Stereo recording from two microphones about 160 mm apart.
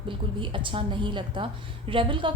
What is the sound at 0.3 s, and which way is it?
A woman's voice, 30° right (ahead or behind).